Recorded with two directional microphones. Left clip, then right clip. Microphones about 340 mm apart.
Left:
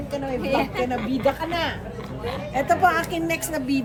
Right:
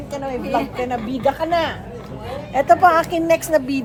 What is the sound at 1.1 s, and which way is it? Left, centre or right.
Speech, centre.